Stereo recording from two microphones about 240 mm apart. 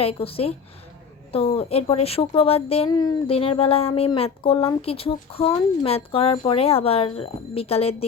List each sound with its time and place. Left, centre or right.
0.0 s speech: left